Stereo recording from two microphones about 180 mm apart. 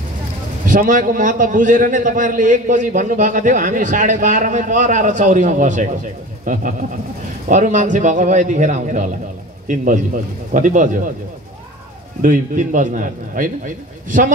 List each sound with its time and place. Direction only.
0.7 s a man's voice: 50° right (ahead or behind)
12.2 s a man's voice: 45° right (ahead or behind)